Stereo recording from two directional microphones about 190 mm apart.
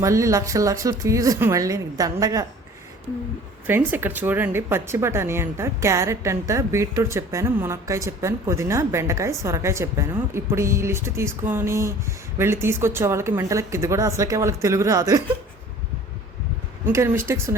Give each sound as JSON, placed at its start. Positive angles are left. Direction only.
{"t": 0.0, "sound": "speech", "side_deg": -15}
{"t": 3.7, "sound": "speech", "side_deg": -10}
{"t": 16.8, "sound": "speech", "side_deg": -15}